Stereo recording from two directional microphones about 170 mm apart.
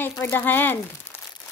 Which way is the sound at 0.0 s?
15° left (ahead or behind).